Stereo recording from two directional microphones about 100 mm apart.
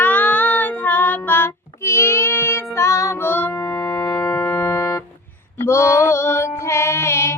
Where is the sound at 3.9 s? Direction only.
40° left (ahead or behind).